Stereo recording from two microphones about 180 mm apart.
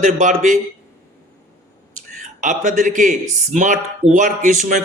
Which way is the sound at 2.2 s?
45° right (ahead or behind).